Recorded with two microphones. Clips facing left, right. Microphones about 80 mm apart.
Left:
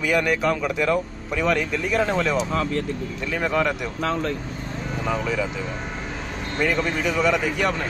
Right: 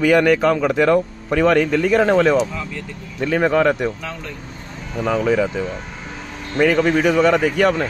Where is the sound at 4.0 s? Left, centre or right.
Left.